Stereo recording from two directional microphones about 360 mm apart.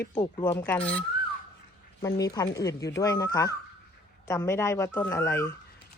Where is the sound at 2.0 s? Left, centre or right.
Centre.